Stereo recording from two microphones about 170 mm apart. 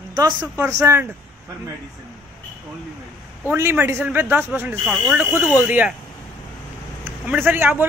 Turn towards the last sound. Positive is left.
turn(degrees=-10)  # may be behind; listen again after turning